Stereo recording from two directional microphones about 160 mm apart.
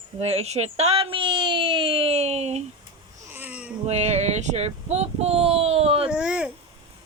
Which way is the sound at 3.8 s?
45° right (ahead or behind).